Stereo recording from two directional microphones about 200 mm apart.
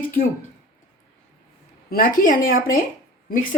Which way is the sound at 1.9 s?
45° left (ahead or behind).